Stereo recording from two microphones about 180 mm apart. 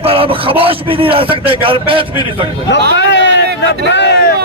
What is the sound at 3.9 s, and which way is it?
Speech, 70° left (ahead or behind).